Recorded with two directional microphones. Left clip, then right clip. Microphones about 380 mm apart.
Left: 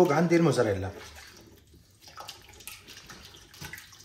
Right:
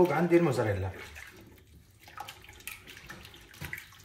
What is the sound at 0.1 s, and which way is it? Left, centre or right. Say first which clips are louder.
Speech: left 2 dB; centre.